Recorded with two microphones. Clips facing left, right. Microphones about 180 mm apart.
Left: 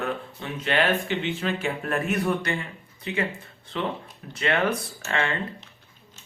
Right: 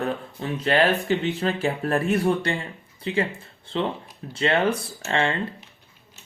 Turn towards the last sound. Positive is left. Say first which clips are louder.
# right 4 dB
turn(degrees=-30)  # may be behind; listen again after turning